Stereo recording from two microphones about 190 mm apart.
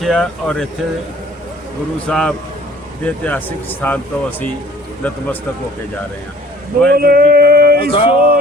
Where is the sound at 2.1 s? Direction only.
5° left (ahead or behind).